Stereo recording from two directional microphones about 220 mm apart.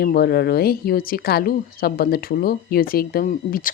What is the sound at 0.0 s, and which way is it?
Speech, 45° left (ahead or behind).